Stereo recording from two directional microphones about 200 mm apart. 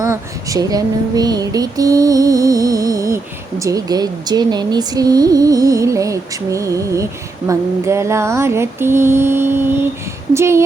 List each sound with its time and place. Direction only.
0.0 s speech: 15° right (ahead or behind)